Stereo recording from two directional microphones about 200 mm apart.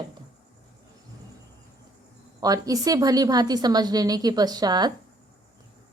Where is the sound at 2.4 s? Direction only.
20° right (ahead or behind).